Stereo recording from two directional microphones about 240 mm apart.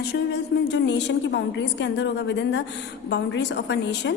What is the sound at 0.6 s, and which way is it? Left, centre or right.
A woman's voice, left.